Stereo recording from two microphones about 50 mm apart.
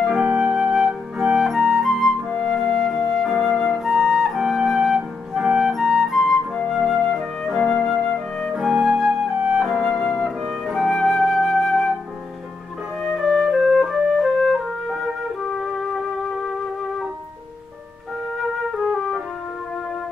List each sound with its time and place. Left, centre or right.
0.0 s flute: centre
2.5 s music: centre
3.3 s flute: centre
5.7 s music: centre
6.3 s flute: centre
6.7 s flute: centre
13.0 s music: centre